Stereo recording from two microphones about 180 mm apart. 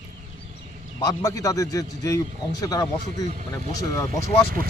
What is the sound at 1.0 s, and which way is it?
Speech, 20° left (ahead or behind).